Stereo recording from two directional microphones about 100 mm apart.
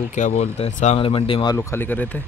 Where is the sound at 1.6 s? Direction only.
25° left (ahead or behind).